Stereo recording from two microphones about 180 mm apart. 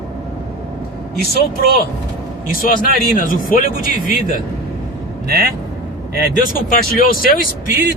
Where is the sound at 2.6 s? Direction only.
50° left (ahead or behind).